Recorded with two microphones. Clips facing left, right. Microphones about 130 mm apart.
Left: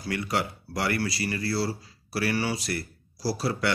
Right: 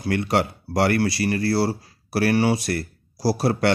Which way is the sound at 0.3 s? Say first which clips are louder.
Right 7 dB; 70° right (ahead or behind).